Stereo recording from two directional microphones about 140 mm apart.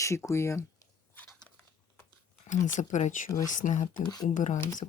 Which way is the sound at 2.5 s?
60° left (ahead or behind).